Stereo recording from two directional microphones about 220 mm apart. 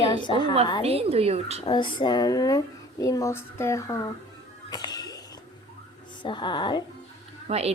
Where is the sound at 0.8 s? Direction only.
25° right (ahead or behind).